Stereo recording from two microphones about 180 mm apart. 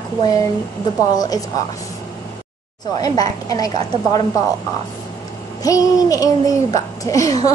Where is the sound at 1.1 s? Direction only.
20° left (ahead or behind).